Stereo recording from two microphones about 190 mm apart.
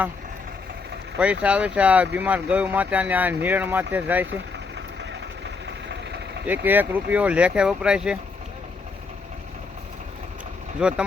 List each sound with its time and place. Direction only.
1.2 s speech: 5° right (ahead or behind)
6.5 s speech: 10° right (ahead or behind)
10.8 s speech: 5° right (ahead or behind)